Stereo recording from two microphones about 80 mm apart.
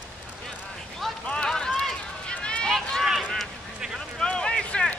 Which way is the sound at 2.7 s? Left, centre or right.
Centre.